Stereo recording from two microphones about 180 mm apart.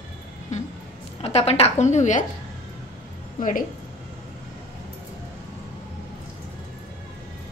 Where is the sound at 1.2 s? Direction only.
35° left (ahead or behind).